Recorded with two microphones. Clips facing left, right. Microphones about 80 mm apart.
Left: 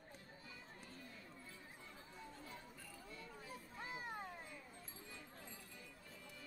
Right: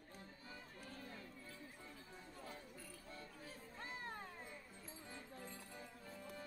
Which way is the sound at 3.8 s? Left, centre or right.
Centre.